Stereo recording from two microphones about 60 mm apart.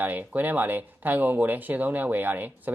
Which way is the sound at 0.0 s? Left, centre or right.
Right.